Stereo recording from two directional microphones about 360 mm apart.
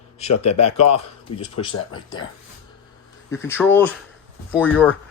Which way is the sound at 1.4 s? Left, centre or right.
Centre.